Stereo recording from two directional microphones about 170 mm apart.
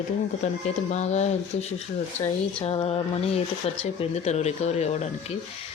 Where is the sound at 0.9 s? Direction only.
40° left (ahead or behind).